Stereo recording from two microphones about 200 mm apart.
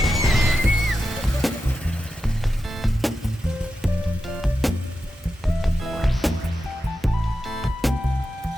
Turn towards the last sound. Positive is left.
turn(degrees=0)  # may be behind; listen again after turning